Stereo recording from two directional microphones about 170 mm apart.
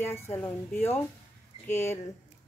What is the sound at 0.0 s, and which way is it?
Speech, 15° left (ahead or behind).